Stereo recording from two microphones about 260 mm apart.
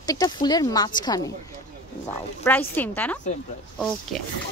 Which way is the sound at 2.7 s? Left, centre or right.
Centre.